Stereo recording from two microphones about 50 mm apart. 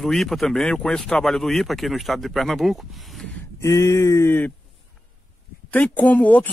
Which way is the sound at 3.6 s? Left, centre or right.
Left.